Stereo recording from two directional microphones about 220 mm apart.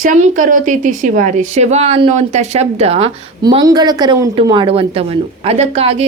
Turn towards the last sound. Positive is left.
turn(degrees=-25)  # may be behind; listen again after turning